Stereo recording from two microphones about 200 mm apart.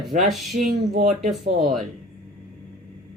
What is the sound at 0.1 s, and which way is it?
Speech, 40° right (ahead or behind).